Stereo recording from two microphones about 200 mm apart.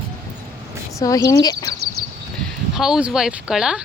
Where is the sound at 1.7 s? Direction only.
55° right (ahead or behind).